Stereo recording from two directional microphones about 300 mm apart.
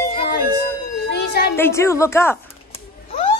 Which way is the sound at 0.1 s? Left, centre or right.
Left.